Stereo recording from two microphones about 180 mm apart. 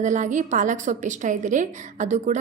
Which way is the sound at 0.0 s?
45° right (ahead or behind).